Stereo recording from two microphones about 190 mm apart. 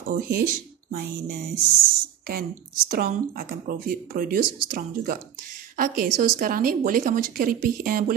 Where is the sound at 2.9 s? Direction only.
50° right (ahead or behind).